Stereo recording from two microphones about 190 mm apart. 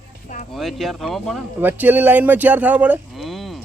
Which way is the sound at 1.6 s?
10° right (ahead or behind).